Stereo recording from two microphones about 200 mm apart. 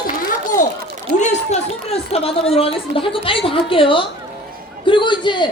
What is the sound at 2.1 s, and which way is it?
A woman's voice, 30° left (ahead or behind).